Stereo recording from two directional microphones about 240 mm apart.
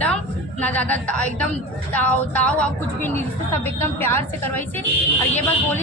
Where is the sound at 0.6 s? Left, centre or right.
Centre.